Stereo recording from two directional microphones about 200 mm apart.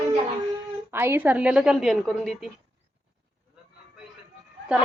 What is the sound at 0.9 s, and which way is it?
A woman's voice, 10° right (ahead or behind).